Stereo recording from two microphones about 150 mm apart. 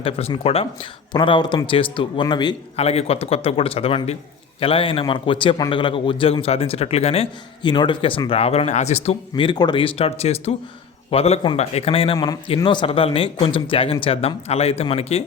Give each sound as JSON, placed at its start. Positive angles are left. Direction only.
{"t": 0.0, "sound": "a man's voice", "side_deg": 40}
{"t": 2.7, "sound": "a man's voice", "side_deg": 45}
{"t": 7.6, "sound": "a man's voice", "side_deg": 30}
{"t": 9.3, "sound": "a man's voice", "side_deg": 30}
{"t": 12.1, "sound": "a man's voice", "side_deg": 25}
{"t": 12.6, "sound": "a man's voice", "side_deg": 35}